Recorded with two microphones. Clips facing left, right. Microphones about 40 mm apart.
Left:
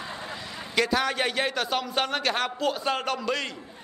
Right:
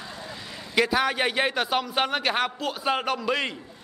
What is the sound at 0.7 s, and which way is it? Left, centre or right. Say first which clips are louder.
A man's voice: right 2 dB; centre.